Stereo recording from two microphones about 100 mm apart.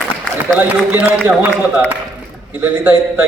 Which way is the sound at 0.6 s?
20° right (ahead or behind).